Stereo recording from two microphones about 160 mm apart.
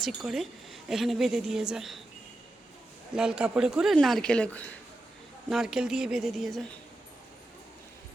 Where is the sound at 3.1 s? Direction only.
5° right (ahead or behind).